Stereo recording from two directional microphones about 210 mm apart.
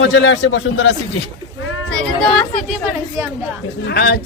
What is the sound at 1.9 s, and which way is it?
Speech, 5° left (ahead or behind).